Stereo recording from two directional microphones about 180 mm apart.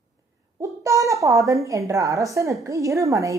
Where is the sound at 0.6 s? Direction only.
15° right (ahead or behind).